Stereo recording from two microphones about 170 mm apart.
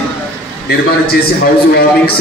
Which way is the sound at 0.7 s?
70° left (ahead or behind).